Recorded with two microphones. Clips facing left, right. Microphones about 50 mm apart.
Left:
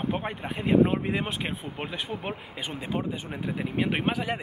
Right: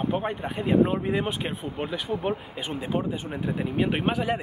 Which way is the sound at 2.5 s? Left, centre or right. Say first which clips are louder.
Right 3 dB; centre.